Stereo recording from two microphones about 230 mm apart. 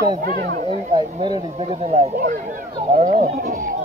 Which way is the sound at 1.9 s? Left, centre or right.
Right.